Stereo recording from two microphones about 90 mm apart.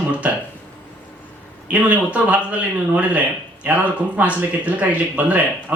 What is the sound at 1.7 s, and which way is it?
A man's voice, 15° right (ahead or behind).